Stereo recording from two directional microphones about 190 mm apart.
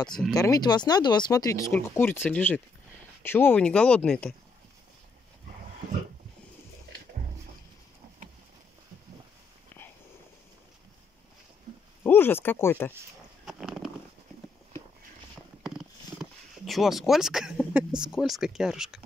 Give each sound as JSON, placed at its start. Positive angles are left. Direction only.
{"t": 0.3, "sound": "speech", "side_deg": 20}
{"t": 12.0, "sound": "speech", "side_deg": 10}
{"t": 13.5, "sound": "a sound", "side_deg": 0}
{"t": 16.2, "sound": "speech", "side_deg": 0}